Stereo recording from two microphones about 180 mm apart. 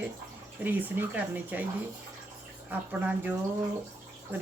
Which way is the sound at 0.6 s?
10° right (ahead or behind).